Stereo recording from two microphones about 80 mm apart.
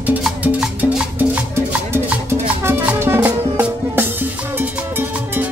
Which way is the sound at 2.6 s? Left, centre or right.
Right.